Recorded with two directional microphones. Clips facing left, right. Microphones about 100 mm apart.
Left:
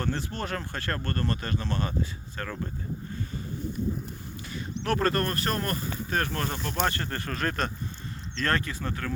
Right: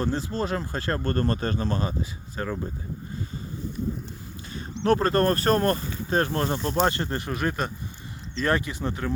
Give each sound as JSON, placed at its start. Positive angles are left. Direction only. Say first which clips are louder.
{"t": 0.0, "sound": "speech", "louder": "right 5 dB", "side_deg": -20}
{"t": 1.9, "sound": "speech", "louder": "even", "side_deg": -20}
{"t": 4.0, "sound": "speech", "louder": "even", "side_deg": -30}